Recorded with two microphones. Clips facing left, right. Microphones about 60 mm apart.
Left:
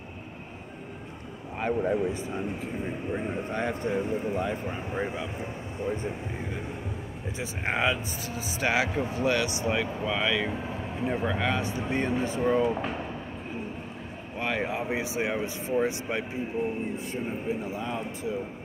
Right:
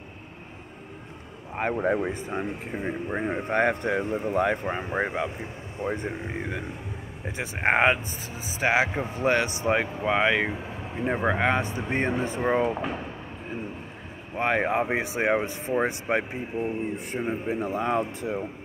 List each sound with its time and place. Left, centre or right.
1.7 s speech: right
8.5 s speech: right
9.2 s speech: right
14.4 s speech: right
17.3 s speech: right